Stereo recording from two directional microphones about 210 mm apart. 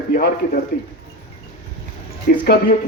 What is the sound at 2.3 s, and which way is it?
Speech, 45° left (ahead or behind).